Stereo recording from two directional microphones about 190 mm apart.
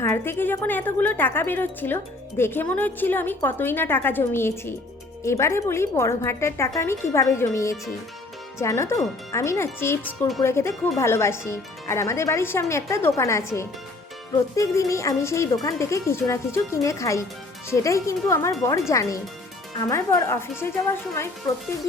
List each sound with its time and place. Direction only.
0.0 s speech: 10° left (ahead or behind)
10.1 s speech: centre (ahead or behind)
10.4 s speech: 15° left (ahead or behind)